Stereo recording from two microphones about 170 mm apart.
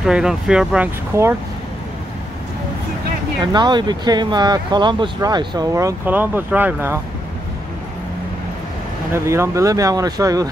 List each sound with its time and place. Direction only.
0.0 s speech: 5° right (ahead or behind)
1.1 s speech: 15° right (ahead or behind)
3.5 s speech: 25° right (ahead or behind)
9.1 s speech: 15° right (ahead or behind)